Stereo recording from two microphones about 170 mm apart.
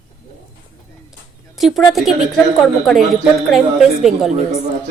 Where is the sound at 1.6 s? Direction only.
Centre (ahead or behind).